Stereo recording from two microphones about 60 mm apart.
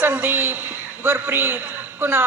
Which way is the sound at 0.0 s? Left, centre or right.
Right.